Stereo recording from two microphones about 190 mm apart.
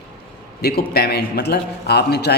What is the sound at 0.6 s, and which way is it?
A man's voice, 60° left (ahead or behind).